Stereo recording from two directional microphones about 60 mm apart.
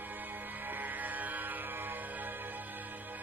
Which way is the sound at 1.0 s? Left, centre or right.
Right.